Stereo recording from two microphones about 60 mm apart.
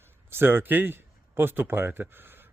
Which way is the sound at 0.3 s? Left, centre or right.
Right.